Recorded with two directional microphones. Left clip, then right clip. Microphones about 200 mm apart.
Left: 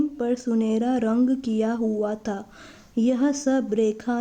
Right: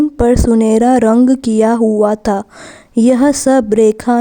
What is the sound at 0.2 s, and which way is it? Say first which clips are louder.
A woman's voice: right 14 dB; 55° right (ahead or behind).